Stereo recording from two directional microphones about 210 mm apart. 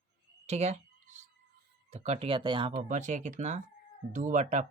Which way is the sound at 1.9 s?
30° right (ahead or behind).